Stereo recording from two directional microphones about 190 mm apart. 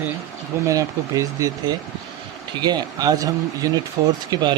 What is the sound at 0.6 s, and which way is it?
Speech, 15° right (ahead or behind).